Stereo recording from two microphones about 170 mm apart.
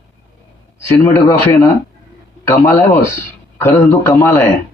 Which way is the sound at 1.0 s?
15° left (ahead or behind).